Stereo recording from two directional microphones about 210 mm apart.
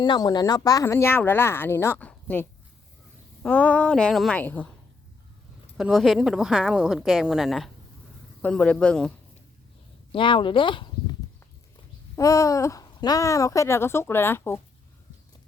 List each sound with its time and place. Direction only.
0.0 s speech: 20° left (ahead or behind)
5.7 s speech: centre (ahead or behind)
10.1 s speech: 25° left (ahead or behind)
12.1 s speech: 15° left (ahead or behind)